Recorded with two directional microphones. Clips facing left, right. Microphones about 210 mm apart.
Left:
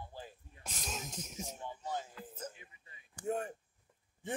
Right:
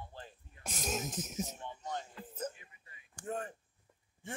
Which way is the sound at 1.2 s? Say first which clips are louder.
Right 5 dB; 5° right (ahead or behind).